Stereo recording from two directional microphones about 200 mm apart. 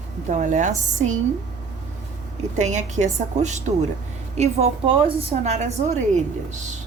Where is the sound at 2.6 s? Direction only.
35° right (ahead or behind).